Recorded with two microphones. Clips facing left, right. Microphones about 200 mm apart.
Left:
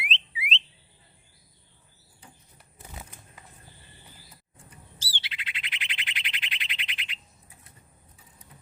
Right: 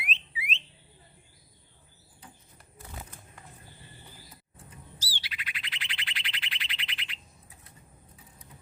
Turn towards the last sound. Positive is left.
turn(degrees=20)  # may be behind; listen again after turning